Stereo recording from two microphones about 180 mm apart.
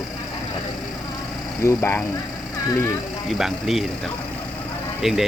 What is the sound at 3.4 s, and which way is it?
Speech, centre (ahead or behind).